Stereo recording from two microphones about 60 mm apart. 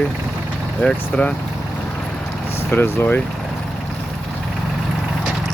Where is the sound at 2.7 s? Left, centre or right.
Left.